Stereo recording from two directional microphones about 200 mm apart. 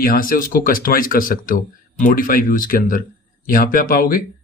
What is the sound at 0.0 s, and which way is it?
Speech, 45° left (ahead or behind).